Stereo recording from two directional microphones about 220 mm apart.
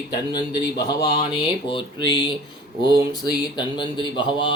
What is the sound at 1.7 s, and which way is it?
Speech, 20° left (ahead or behind).